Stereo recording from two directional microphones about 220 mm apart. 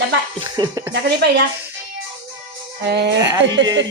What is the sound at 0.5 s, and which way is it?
Speech, 15° right (ahead or behind).